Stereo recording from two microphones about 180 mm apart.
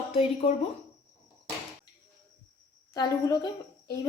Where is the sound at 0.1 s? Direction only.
35° left (ahead or behind).